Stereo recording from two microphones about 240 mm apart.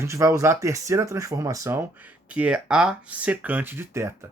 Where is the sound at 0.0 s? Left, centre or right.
Centre.